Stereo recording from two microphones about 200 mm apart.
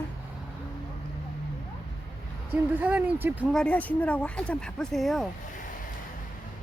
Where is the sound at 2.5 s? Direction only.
10° right (ahead or behind).